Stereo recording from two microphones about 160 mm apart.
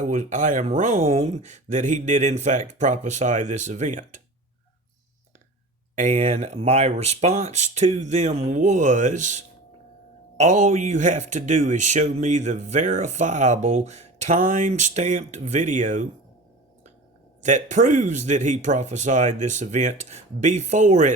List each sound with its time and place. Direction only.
0.0 s speech: 50° right (ahead or behind)
6.0 s speech: 50° right (ahead or behind)
17.4 s speech: 50° right (ahead or behind)